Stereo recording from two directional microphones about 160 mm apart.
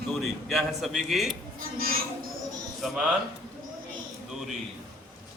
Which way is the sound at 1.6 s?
65° right (ahead or behind).